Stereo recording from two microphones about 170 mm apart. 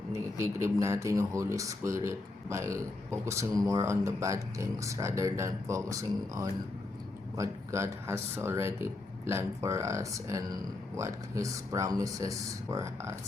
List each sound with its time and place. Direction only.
0.1 s speech: 15° right (ahead or behind)